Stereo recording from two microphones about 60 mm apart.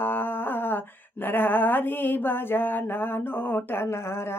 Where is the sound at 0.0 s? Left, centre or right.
Left.